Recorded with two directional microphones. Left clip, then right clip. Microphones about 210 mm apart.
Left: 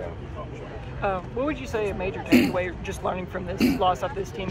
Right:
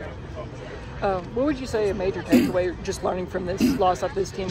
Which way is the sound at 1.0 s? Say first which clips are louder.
Right 3 dB; 70° right (ahead or behind).